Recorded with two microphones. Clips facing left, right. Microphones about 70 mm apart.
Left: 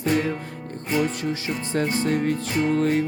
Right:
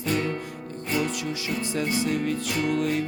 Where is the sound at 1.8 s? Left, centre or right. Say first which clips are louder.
Left 4 dB; left.